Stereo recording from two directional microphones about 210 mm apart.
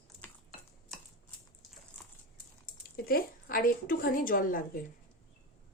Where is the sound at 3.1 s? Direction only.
45° left (ahead or behind).